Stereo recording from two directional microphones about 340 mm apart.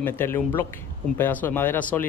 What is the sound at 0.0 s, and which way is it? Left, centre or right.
Speech, centre.